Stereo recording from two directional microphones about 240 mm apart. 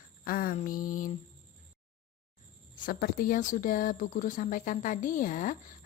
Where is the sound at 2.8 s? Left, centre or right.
Left.